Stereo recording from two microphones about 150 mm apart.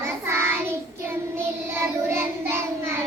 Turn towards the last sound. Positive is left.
turn(degrees=-15)  # may be behind; listen again after turning